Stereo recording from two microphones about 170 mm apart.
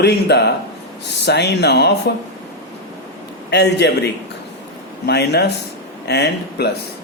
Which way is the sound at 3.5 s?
80° left.